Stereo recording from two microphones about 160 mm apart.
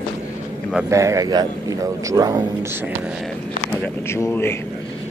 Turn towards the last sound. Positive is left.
turn(degrees=15)  # may be behind; listen again after turning